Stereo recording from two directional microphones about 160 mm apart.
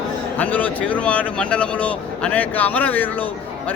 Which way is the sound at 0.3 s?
10° left (ahead or behind).